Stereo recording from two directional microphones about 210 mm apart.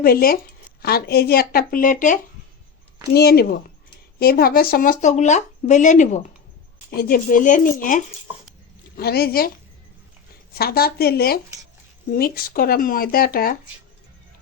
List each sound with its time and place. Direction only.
0.0 s speech: 45° left (ahead or behind)
3.1 s speech: 50° left (ahead or behind)
10.5 s speech: 45° left (ahead or behind)